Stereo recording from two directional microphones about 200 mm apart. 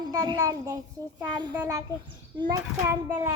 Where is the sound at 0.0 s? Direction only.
20° right (ahead or behind).